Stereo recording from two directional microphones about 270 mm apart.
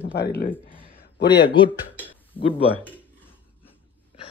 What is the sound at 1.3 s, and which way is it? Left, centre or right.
Speech, centre.